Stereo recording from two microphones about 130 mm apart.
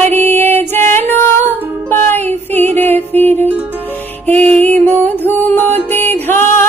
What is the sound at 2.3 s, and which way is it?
Child singing, 15° left (ahead or behind).